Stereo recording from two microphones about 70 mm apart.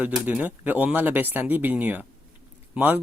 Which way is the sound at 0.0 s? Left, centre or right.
Right.